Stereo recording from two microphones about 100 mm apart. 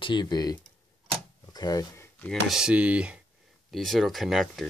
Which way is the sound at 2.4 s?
5° right (ahead or behind).